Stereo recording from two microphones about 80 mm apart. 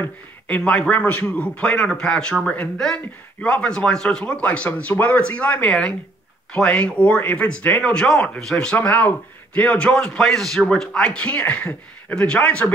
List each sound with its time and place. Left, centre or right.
0.0 s a man's voice: centre
8.7 s a man's voice: centre